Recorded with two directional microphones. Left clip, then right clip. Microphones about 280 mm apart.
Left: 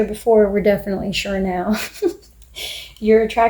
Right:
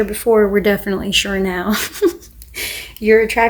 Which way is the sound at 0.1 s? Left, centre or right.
Right.